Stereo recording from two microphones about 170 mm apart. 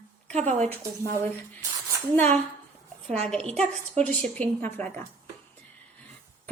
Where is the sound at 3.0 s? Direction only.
40° right (ahead or behind).